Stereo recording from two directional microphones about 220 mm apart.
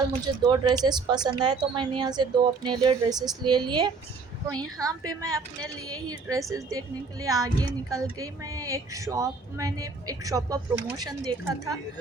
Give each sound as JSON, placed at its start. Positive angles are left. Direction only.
{"t": 0.4, "sound": "speech", "side_deg": -20}